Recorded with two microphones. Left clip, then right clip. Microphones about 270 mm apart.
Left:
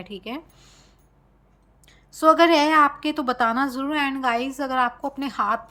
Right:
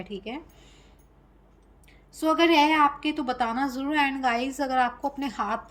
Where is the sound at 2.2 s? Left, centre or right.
Centre.